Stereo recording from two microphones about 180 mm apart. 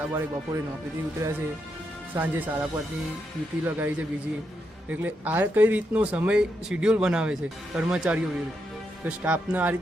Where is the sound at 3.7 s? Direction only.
10° right (ahead or behind).